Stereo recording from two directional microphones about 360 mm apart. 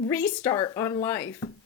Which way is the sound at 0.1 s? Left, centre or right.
Centre.